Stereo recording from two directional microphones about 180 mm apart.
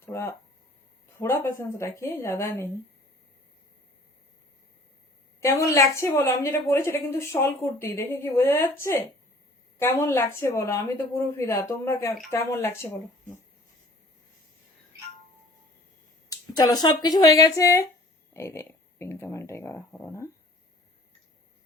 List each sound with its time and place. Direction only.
0.0 s a sound: 15° left (ahead or behind)
1.2 s a woman's voice: 15° left (ahead or behind)
5.4 s a woman's voice: 15° left (ahead or behind)
16.3 s a woman's voice: 20° left (ahead or behind)